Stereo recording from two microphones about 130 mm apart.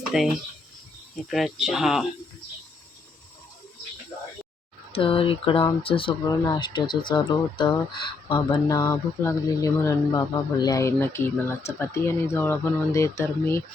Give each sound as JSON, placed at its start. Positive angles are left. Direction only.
{"t": 0.1, "sound": "speech", "side_deg": -5}
{"t": 1.3, "sound": "speech", "side_deg": 0}
{"t": 4.9, "sound": "speech", "side_deg": 45}